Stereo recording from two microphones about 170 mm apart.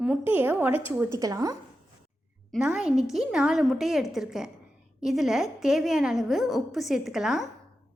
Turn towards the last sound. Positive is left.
turn(degrees=-5)  # may be behind; listen again after turning